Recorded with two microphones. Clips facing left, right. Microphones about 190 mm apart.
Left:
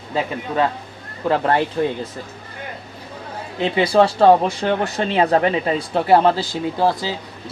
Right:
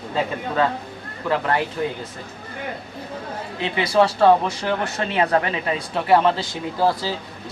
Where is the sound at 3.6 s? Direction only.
30° left (ahead or behind).